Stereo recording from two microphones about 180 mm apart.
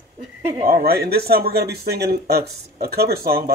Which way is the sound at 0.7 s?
55° right (ahead or behind).